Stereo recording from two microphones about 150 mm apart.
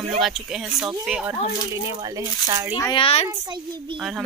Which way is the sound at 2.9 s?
40° left (ahead or behind).